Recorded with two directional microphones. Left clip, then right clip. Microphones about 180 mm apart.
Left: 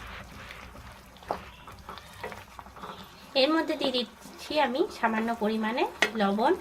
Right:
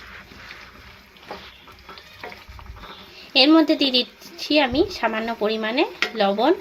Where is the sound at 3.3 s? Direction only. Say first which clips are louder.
Right 9 dB; 40° right (ahead or behind).